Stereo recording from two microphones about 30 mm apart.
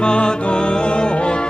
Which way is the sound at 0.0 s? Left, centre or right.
Left.